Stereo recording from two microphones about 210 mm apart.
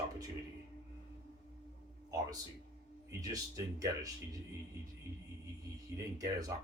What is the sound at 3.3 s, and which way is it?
Speech, 15° right (ahead or behind).